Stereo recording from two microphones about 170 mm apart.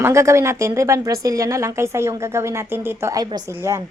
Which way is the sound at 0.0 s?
15° right (ahead or behind).